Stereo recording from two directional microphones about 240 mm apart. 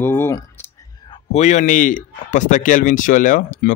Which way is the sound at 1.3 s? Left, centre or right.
Left.